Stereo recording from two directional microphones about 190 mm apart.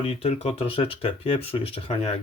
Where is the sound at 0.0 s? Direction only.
30° left (ahead or behind).